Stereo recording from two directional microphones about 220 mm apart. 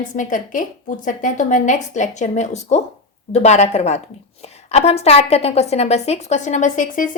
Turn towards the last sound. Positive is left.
turn(degrees=35)  # may be behind; listen again after turning